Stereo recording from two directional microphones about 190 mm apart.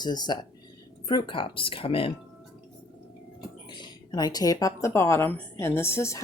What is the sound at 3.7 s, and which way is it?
Speech, 20° left (ahead or behind).